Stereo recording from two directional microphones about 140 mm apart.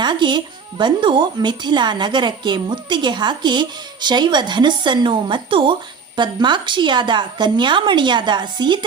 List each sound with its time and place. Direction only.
0.0 s speech: 35° right (ahead or behind)